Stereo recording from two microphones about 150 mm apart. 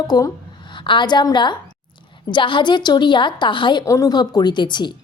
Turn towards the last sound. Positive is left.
turn(degrees=30)  # may be behind; listen again after turning